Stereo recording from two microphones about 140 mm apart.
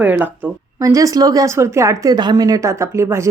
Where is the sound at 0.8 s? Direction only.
25° right (ahead or behind).